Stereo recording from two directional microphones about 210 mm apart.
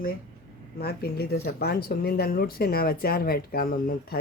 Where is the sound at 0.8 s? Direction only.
50° left (ahead or behind).